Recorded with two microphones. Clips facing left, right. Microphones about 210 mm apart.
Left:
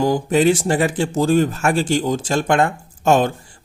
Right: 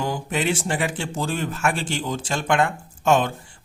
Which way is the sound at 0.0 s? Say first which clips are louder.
Left 9 dB; 40° left (ahead or behind).